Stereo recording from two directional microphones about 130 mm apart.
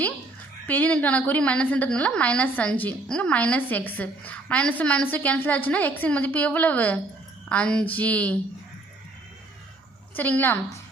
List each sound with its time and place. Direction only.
0.7 s a woman's voice: 10° left (ahead or behind)
10.2 s a woman's voice: 15° left (ahead or behind)